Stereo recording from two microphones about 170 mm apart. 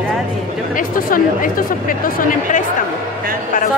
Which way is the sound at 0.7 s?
55° left (ahead or behind).